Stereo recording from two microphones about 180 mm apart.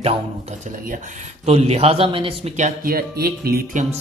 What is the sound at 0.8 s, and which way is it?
Speech, 50° right (ahead or behind).